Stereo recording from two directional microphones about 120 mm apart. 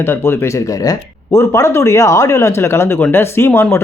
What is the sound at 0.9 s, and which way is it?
Speech, 25° left (ahead or behind).